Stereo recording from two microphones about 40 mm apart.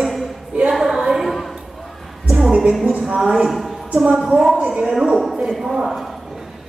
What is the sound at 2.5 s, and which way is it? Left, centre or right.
Music, right.